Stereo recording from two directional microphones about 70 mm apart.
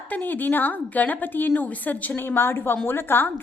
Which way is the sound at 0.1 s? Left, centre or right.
Left.